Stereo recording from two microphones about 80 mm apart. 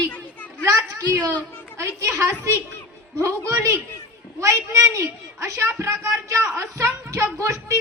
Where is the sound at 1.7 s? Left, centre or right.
Right.